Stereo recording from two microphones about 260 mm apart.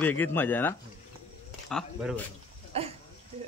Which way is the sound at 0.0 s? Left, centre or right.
Centre.